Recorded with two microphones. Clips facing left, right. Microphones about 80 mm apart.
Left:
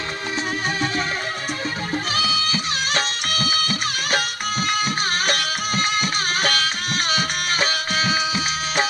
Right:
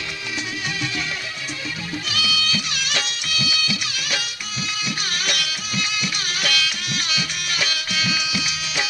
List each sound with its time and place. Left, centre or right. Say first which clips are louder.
2.1 s music: left 2 dB; left